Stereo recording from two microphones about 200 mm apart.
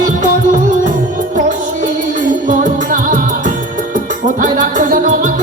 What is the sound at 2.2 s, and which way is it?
Music, 40° right (ahead or behind).